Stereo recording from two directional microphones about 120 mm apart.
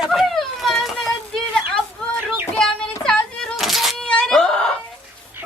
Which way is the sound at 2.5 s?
5° left (ahead or behind).